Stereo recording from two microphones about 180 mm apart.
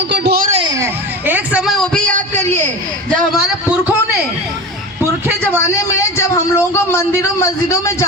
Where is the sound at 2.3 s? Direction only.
15° left (ahead or behind).